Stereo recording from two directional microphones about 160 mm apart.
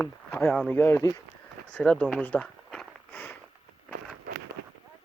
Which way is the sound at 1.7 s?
5° left (ahead or behind).